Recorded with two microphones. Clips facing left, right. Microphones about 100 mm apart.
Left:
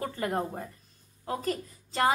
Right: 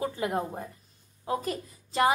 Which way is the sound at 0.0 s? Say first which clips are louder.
Right 1 dB; 15° right (ahead or behind).